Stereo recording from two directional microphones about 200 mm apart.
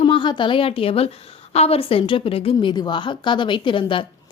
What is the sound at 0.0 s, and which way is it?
A woman's voice, 25° left (ahead or behind).